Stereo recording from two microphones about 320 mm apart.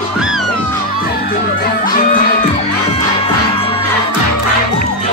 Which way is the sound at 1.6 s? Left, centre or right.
Left.